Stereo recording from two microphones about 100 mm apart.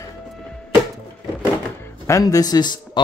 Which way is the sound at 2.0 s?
35° left (ahead or behind).